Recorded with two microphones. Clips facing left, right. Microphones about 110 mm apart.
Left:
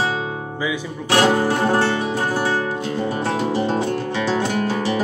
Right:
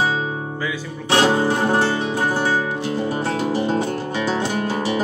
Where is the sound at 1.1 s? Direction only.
25° right (ahead or behind).